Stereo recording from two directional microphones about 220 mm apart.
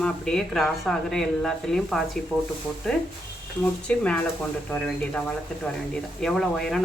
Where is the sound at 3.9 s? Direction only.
5° left (ahead or behind).